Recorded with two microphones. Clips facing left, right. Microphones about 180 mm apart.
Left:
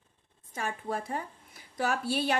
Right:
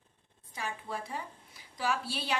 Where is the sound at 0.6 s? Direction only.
50° left (ahead or behind).